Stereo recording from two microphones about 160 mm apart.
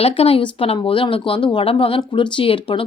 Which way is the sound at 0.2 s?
35° left (ahead or behind).